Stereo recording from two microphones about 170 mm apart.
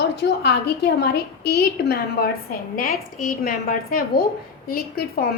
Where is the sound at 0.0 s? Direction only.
75° left (ahead or behind).